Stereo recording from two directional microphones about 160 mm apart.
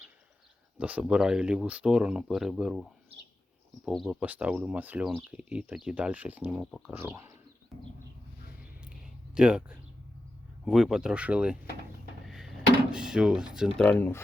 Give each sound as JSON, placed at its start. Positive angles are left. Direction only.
{"t": 0.8, "sound": "speech", "side_deg": -10}
{"t": 3.8, "sound": "speech", "side_deg": 0}
{"t": 6.9, "sound": "speech", "side_deg": -15}
{"t": 8.8, "sound": "a sound", "side_deg": -5}
{"t": 10.7, "sound": "speech", "side_deg": 0}
{"t": 12.2, "sound": "drawer open or close", "side_deg": 0}
{"t": 13.8, "sound": "speech", "side_deg": 10}